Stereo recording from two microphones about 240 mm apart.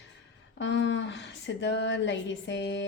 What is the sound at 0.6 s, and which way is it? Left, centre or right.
Speech, left.